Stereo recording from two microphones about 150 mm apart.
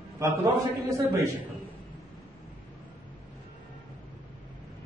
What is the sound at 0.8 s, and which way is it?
Speech, 20° right (ahead or behind).